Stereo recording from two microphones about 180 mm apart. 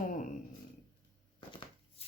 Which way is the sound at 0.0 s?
45° left (ahead or behind).